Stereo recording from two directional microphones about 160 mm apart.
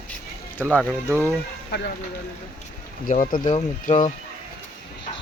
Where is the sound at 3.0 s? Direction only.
55° left (ahead or behind).